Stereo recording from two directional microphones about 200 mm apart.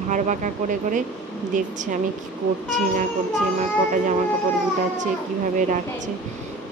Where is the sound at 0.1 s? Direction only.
40° right (ahead or behind).